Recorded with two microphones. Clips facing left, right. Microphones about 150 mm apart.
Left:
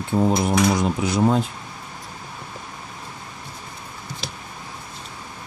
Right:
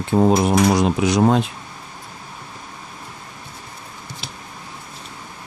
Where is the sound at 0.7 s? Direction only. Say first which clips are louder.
Right 4 dB; 80° right.